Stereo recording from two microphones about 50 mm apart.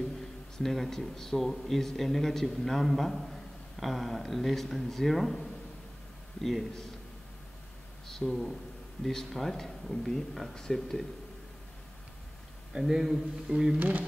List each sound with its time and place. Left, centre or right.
0.6 s a man's voice: centre
8.1 s speech: centre
12.7 s a man's voice: centre
13.7 s speech: right